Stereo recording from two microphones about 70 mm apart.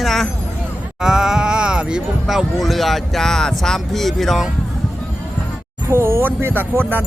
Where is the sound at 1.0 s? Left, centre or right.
Centre.